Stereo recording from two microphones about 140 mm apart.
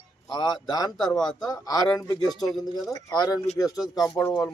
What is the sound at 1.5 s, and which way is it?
A man's voice, 25° left (ahead or behind).